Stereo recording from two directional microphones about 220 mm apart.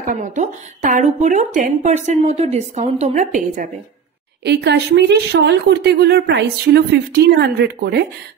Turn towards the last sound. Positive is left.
turn(degrees=-45)  # may be behind; listen again after turning